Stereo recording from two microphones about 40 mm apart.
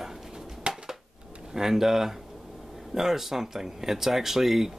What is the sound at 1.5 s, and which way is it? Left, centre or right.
Speech, centre.